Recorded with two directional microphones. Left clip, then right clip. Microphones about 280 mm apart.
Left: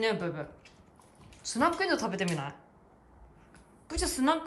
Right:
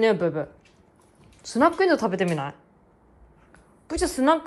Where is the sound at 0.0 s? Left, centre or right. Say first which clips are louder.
Right 9 dB; centre.